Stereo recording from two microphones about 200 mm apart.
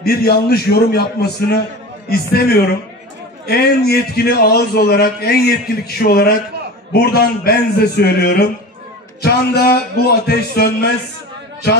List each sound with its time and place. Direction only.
0.0 s a man's voice: 50° left (ahead or behind)